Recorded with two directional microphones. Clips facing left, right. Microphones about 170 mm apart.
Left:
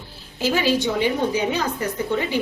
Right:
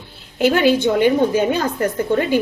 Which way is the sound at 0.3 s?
60° right (ahead or behind).